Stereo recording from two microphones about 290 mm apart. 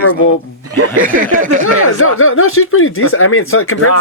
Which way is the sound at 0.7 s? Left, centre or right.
Right.